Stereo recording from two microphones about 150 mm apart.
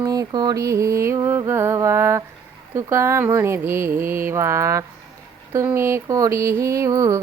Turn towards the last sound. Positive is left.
turn(degrees=-20)  # may be behind; listen again after turning